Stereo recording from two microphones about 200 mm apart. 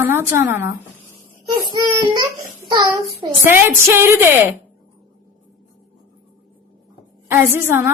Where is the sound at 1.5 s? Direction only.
20° right (ahead or behind).